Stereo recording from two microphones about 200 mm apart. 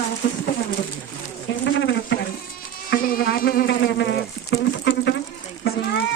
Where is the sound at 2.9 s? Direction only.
45° left (ahead or behind).